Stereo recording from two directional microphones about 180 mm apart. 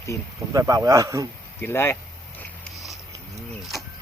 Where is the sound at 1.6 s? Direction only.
10° left (ahead or behind).